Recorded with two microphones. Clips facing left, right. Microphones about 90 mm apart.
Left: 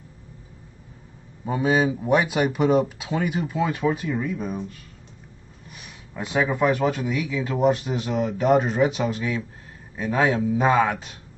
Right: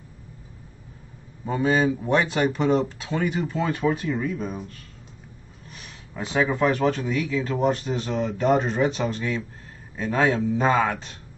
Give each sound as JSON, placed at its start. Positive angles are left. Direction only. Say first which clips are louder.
{"t": 1.4, "sound": "a man's voice", "louder": "even", "side_deg": 10}